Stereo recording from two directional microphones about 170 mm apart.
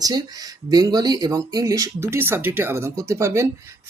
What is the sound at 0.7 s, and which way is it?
Speech, 25° right (ahead or behind).